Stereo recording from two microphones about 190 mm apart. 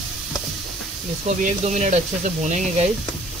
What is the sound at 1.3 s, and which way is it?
Speech, 40° right (ahead or behind).